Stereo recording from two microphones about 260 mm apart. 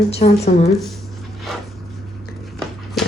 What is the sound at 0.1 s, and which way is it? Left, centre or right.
Speech, left.